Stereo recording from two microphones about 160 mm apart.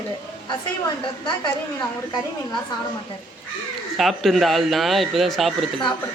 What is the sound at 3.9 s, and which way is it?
Speech, centre (ahead or behind).